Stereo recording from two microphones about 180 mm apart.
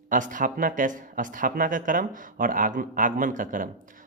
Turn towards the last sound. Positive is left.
turn(degrees=-45)  # may be behind; listen again after turning